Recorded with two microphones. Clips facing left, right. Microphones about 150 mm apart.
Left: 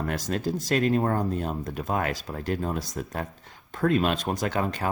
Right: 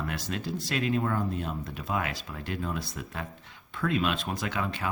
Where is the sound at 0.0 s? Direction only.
45° left (ahead or behind).